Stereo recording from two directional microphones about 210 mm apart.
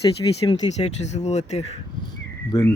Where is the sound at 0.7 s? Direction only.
30° left (ahead or behind).